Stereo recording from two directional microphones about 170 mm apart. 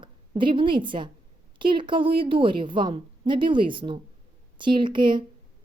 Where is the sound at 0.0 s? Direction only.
30° right (ahead or behind).